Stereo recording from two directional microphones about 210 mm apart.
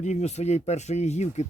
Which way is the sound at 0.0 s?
30° left (ahead or behind).